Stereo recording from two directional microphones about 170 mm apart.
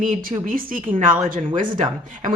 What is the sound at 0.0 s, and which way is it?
A woman's voice, 55° right (ahead or behind).